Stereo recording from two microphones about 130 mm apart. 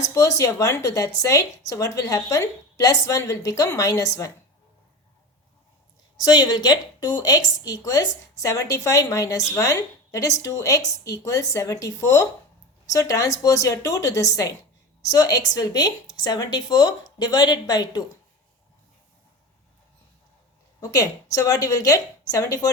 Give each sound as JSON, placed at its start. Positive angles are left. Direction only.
{"t": 0.1, "sound": "speech", "side_deg": 25}
{"t": 6.1, "sound": "a woman's voice", "side_deg": 30}
{"t": 20.9, "sound": "speech", "side_deg": 25}